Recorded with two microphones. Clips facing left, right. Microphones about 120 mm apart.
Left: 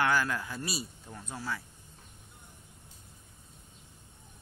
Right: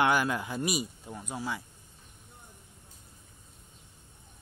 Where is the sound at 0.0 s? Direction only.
20° right (ahead or behind).